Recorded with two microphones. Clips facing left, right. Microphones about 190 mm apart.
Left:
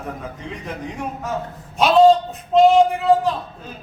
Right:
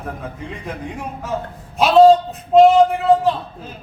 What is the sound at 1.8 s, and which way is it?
A man's voice, centre (ahead or behind).